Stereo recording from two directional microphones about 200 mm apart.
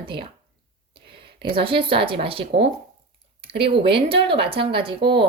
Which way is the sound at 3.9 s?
25° right (ahead or behind).